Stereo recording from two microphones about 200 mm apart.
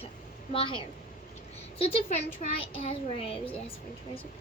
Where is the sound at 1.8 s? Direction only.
30° left (ahead or behind).